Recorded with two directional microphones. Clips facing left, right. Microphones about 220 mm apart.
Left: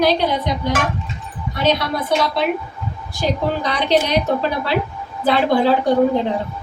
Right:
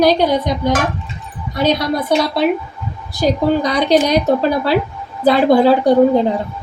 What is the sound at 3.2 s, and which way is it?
Speech, 40° right (ahead or behind).